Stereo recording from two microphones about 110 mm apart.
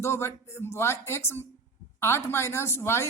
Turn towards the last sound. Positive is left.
turn(degrees=25)  # may be behind; listen again after turning